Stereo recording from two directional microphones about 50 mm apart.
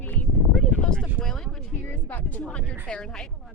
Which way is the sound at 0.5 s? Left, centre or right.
Left.